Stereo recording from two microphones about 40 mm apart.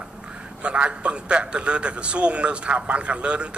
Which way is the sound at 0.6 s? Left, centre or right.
Right.